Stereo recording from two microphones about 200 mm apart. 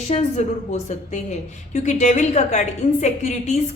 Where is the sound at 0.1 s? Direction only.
35° left (ahead or behind).